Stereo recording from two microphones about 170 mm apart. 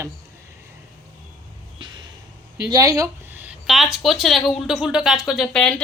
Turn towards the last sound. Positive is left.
turn(degrees=5)  # may be behind; listen again after turning